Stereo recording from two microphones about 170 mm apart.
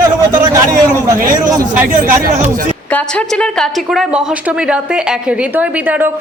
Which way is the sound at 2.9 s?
10° left (ahead or behind).